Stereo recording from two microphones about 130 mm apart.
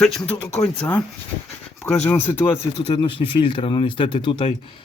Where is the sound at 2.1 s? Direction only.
15° left (ahead or behind).